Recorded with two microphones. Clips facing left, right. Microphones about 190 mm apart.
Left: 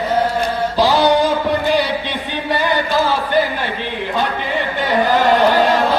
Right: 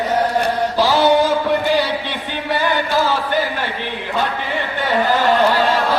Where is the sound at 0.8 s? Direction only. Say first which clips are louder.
Left 1 dB; 15° left (ahead or behind).